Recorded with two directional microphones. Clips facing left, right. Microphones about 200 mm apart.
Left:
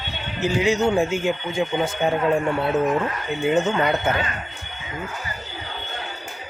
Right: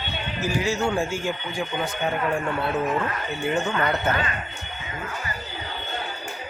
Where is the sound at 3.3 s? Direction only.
20° left (ahead or behind).